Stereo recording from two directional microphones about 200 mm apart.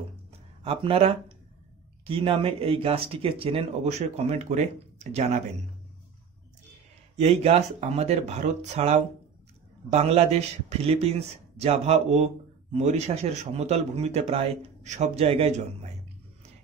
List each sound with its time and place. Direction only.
0.7 s a man's voice: 30° right (ahead or behind)
7.2 s a man's voice: 30° right (ahead or behind)